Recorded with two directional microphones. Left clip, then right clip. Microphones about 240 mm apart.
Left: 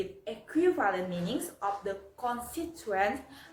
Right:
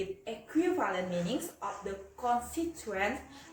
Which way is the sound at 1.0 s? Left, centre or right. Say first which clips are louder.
Right 1 dB; centre.